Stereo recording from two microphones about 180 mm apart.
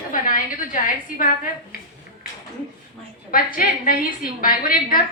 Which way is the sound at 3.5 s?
55° left (ahead or behind).